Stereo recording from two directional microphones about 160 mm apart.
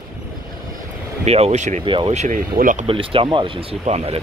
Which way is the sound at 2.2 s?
55° right (ahead or behind).